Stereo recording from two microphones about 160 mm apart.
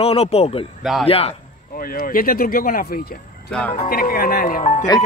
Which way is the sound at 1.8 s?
65° left (ahead or behind).